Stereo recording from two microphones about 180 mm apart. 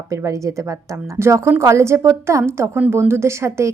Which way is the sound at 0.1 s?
15° right (ahead or behind).